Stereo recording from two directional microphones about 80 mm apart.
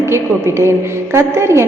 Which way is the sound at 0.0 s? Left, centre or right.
Right.